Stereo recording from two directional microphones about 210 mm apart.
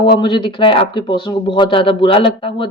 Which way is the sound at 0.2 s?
20° left (ahead or behind).